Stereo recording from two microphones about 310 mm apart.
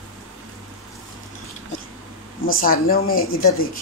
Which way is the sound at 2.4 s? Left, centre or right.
Left.